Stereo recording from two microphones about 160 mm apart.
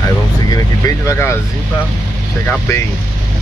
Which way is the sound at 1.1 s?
15° left (ahead or behind).